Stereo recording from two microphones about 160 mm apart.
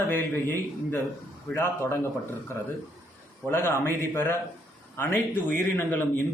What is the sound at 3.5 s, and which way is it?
A man's voice, 15° left (ahead or behind).